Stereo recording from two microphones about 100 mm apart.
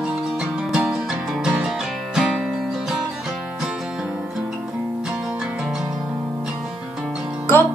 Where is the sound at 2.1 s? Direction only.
5° right (ahead or behind).